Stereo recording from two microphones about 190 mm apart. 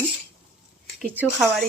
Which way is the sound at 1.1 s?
5° right (ahead or behind).